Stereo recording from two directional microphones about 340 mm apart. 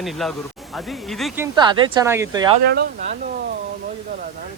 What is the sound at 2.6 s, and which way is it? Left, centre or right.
Speech, right.